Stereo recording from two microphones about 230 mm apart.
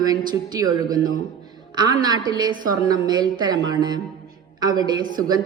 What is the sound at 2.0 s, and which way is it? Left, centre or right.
A woman's voice, centre.